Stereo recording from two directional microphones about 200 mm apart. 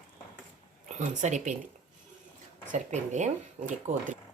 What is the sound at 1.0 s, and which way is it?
Speech, 35° right (ahead or behind).